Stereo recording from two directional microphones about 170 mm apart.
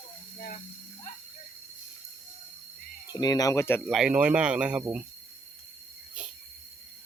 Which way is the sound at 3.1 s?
20° left (ahead or behind).